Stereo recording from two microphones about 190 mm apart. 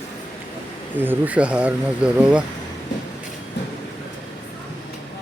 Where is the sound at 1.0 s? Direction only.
10° right (ahead or behind).